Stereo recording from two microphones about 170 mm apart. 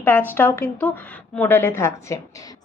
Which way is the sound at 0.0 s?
10° left (ahead or behind).